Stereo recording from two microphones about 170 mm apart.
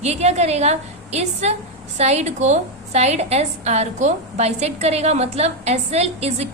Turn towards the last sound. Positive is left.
turn(degrees=-40)  # may be behind; listen again after turning